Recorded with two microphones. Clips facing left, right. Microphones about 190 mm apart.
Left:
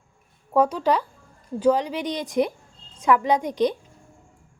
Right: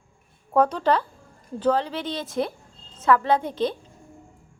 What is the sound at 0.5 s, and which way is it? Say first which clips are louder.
Speech: even; 10° left (ahead or behind).